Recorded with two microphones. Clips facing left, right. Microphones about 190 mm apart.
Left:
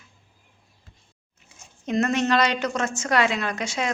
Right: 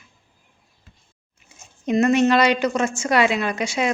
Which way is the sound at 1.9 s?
10° right (ahead or behind).